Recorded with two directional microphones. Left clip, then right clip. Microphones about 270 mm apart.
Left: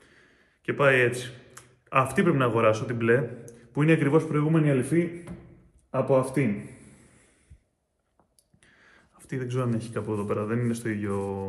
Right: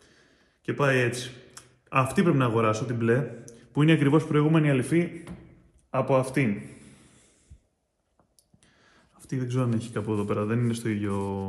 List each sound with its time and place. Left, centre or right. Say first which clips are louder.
0.0 s speech: left 2 dB; centre
4.6 s a man's voice: even; centre
8.6 s a sound: left 4 dB; centre
9.8 s speech: right 1 dB; right